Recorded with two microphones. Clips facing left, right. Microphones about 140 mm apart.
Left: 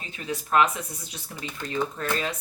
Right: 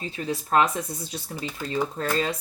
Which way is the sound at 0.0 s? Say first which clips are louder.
Right 3 dB; 35° right (ahead or behind).